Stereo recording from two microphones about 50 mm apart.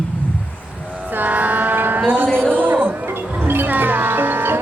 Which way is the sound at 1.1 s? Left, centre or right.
Right.